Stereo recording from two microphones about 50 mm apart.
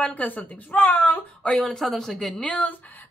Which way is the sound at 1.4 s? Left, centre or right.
Centre.